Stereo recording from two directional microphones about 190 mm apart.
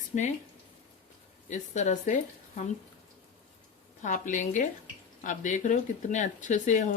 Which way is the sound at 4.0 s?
40° left (ahead or behind).